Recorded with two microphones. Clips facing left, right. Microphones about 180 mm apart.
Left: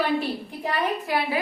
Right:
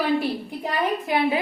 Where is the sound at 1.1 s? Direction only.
20° right (ahead or behind).